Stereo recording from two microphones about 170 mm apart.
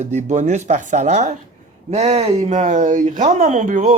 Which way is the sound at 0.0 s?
40° right (ahead or behind).